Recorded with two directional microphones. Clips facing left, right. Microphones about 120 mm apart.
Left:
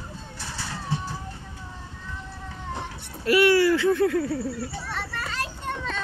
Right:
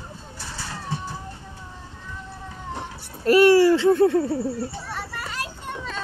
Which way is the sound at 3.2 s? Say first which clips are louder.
Right 4 dB; 35° right (ahead or behind).